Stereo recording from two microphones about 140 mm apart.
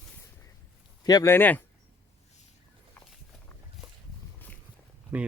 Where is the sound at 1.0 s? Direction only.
30° left (ahead or behind).